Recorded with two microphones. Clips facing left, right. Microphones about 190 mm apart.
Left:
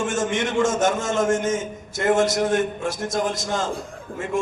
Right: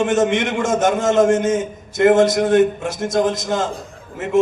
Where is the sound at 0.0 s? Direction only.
20° right (ahead or behind).